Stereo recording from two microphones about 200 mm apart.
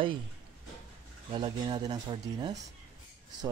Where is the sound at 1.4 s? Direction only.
20° right (ahead or behind).